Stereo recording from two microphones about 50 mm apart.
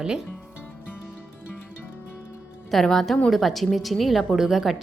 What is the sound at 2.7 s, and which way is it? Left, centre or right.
A woman's voice, centre.